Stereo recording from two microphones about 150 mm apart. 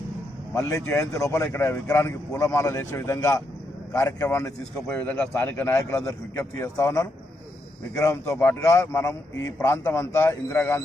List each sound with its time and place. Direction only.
0.5 s a man's voice: 20° left (ahead or behind)